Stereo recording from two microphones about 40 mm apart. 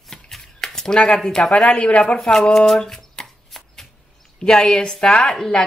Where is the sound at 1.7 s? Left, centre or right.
Left.